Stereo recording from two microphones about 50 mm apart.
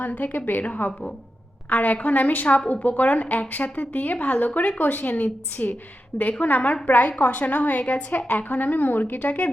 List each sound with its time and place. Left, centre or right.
0.0 s a woman's voice: left
1.7 s a woman's voice: left